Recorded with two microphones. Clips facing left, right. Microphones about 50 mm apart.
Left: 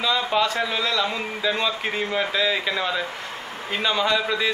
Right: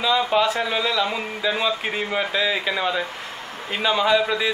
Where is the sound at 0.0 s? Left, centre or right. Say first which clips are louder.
Right 2 dB; centre.